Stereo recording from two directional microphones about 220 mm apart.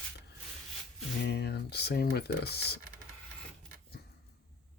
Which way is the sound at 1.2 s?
45° left (ahead or behind).